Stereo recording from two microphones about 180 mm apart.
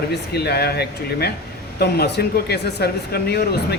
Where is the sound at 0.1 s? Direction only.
65° left (ahead or behind).